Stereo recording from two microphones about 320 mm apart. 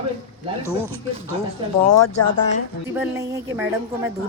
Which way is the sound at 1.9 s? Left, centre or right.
Left.